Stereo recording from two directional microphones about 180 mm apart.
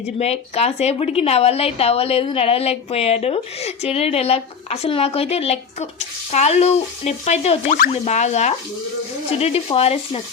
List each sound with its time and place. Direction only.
0.2 s a woman's voice: 35° left (ahead or behind)